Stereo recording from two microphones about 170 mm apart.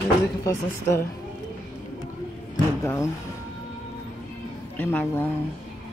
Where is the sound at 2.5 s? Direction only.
15° left (ahead or behind).